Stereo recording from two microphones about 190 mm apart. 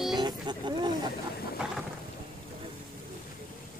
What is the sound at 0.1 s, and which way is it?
Wild animals, 25° right (ahead or behind).